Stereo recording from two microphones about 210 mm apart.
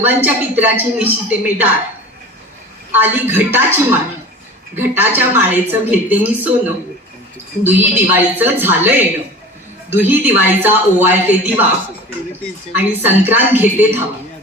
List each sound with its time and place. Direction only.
0.0 s a woman's voice: 10° right (ahead or behind)
2.9 s a woman's voice: 10° right (ahead or behind)
10.1 s a woman's voice: 10° right (ahead or behind)
12.7 s a woman's voice: 10° right (ahead or behind)